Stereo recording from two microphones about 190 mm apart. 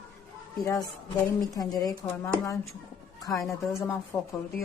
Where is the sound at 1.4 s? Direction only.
20° left (ahead or behind).